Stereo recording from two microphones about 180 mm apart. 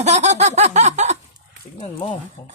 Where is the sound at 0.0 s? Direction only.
40° right (ahead or behind).